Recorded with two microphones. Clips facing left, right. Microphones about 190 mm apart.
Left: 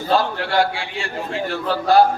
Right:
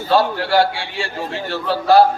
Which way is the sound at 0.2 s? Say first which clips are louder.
Right 3 dB; 30° right (ahead or behind).